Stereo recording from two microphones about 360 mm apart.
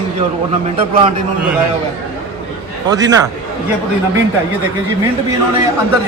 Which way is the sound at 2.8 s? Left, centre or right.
Centre.